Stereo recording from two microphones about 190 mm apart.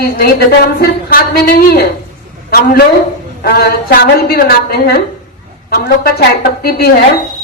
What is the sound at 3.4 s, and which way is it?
A woman's voice, 55° left (ahead or behind).